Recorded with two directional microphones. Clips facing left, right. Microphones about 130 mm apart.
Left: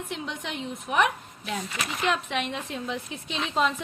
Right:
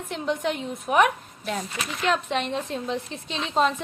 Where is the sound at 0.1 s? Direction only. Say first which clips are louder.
Right 12 dB; 40° right (ahead or behind).